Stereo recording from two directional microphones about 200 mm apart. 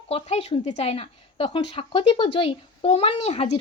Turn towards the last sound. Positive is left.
turn(degrees=30)  # may be behind; listen again after turning